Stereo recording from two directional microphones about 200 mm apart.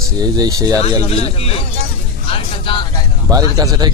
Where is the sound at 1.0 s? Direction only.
30° left (ahead or behind).